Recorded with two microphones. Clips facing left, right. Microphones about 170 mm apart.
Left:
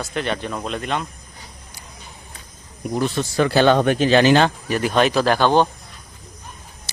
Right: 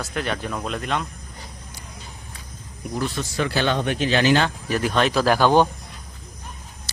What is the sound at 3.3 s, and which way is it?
Speech, 40° left (ahead or behind).